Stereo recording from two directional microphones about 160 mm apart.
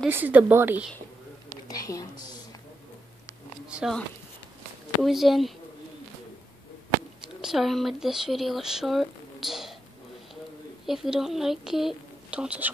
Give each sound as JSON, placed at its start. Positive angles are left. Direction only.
{"t": 0.0, "sound": "speech", "side_deg": -10}
{"t": 1.7, "sound": "speech", "side_deg": 20}
{"t": 3.7, "sound": "speech", "side_deg": 0}
{"t": 5.0, "sound": "speech", "side_deg": 0}
{"t": 7.4, "sound": "speech", "side_deg": 0}
{"t": 10.9, "sound": "speech", "side_deg": 0}